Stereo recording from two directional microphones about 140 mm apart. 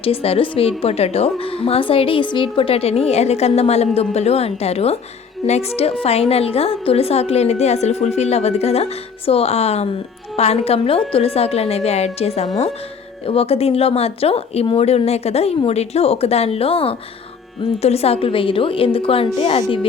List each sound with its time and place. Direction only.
0.0 s a woman's voice: 45° left (ahead or behind)